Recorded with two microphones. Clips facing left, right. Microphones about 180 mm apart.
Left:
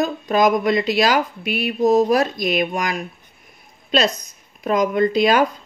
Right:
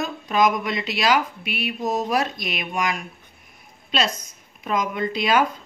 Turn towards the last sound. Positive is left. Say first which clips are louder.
# left 5 dB
turn(degrees=40)  # may be behind; listen again after turning